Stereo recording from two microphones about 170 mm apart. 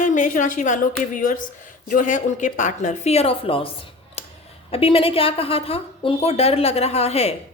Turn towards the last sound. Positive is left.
turn(degrees=40)  # may be behind; listen again after turning